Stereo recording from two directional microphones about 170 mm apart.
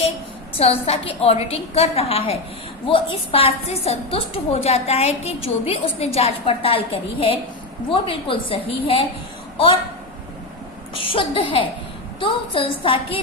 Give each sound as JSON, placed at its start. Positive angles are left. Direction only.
{"t": 0.5, "sound": "a woman's voice", "side_deg": 35}
{"t": 10.9, "sound": "a woman's voice", "side_deg": 30}